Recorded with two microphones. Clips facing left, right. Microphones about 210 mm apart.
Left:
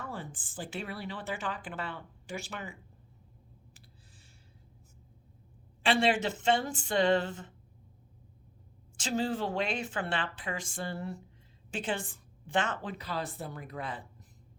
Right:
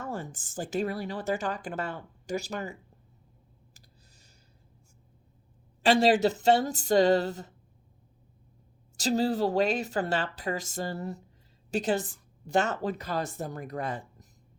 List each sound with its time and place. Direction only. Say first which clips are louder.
0.0 s a woman's voice: right 5 dB; 45° right (ahead or behind)
5.8 s a woman's voice: right 6 dB; 40° right (ahead or behind)
9.0 s a woman's voice: right 6 dB; 40° right (ahead or behind)